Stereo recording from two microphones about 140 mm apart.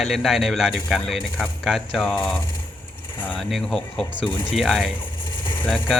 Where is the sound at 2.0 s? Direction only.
10° left (ahead or behind).